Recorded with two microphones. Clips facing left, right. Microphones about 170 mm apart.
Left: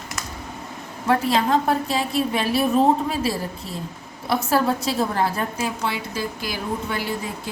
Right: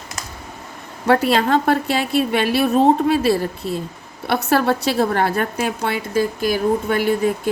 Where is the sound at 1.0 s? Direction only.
75° right (ahead or behind).